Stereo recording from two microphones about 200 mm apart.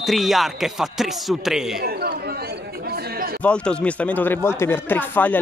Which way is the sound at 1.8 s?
50° right (ahead or behind).